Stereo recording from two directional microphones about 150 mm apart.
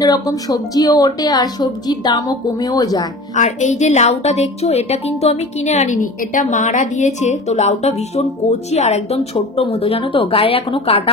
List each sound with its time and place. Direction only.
0.0 s a woman's voice: 25° left (ahead or behind)
3.3 s a woman's voice: 55° left (ahead or behind)